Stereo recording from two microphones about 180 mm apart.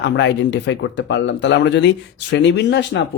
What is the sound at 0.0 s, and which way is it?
Speech, 80° left.